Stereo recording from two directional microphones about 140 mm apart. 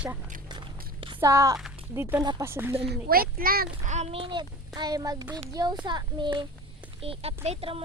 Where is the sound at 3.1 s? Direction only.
90° right.